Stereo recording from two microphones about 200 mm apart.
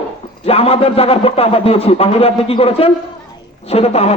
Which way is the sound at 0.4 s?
30° left (ahead or behind).